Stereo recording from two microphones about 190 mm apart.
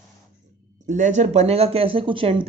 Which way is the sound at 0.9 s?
40° right (ahead or behind).